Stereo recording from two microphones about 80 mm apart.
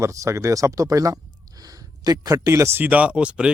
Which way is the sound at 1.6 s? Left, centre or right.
Right.